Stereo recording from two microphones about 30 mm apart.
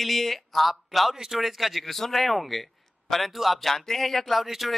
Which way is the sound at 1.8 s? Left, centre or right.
Centre.